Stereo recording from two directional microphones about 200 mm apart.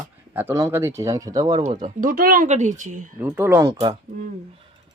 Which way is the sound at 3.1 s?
10° right (ahead or behind).